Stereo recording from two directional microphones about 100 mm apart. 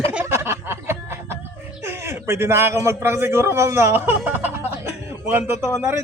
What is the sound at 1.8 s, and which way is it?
A man's voice, 25° right (ahead or behind).